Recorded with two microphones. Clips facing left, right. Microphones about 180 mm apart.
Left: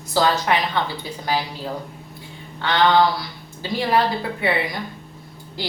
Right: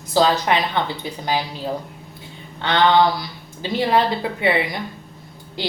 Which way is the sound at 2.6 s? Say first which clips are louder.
Right 1 dB; 20° right (ahead or behind).